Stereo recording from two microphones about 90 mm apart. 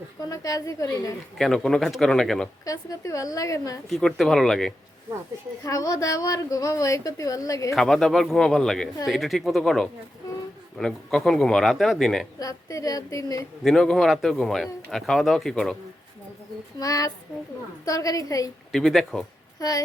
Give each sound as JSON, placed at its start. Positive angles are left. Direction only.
{"t": 0.3, "sound": "a woman's voice", "side_deg": 40}
{"t": 1.4, "sound": "speech", "side_deg": 5}
{"t": 2.6, "sound": "a woman's voice", "side_deg": 35}
{"t": 3.8, "sound": "speech", "side_deg": 5}
{"t": 5.6, "sound": "a woman's voice", "side_deg": 40}
{"t": 7.8, "sound": "speech", "side_deg": 5}
{"t": 12.4, "sound": "a woman's voice", "side_deg": 40}
{"t": 13.7, "sound": "speech", "side_deg": 5}
{"t": 16.8, "sound": "a woman's voice", "side_deg": 40}
{"t": 18.7, "sound": "speech", "side_deg": 0}
{"t": 19.5, "sound": "speech", "side_deg": 45}